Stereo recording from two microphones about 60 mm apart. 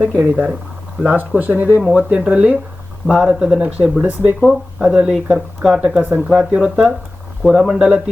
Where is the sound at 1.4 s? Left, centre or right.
Right; by 3.6 s centre.